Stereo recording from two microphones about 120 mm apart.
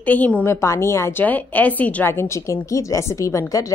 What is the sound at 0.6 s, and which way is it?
A woman's voice, 25° left (ahead or behind).